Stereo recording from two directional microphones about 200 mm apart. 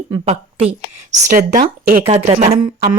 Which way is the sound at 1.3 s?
40° right (ahead or behind).